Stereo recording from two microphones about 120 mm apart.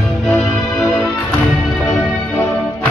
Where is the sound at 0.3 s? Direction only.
15° left (ahead or behind).